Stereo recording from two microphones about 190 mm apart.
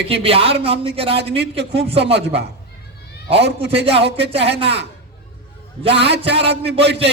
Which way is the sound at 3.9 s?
65° right (ahead or behind).